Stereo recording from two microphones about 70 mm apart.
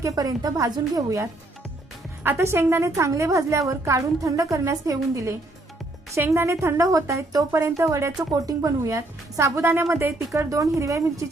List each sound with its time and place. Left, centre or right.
0.0 s a woman's voice: right
8.3 s a woman's voice: right